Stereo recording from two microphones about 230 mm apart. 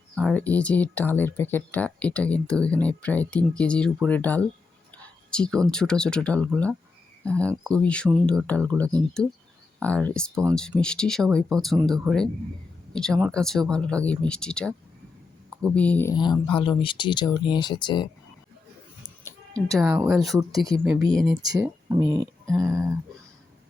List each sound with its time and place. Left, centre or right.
0.2 s speech: centre
9.8 s speech: centre
19.2 s music: centre
20.1 s speech: centre
20.8 s speech: centre
21.1 s speech: centre
21.4 s speech: centre